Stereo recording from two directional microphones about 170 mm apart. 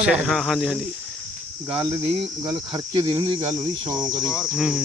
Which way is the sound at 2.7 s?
25° right (ahead or behind).